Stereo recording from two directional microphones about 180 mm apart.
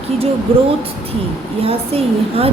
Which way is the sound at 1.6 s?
30° right (ahead or behind).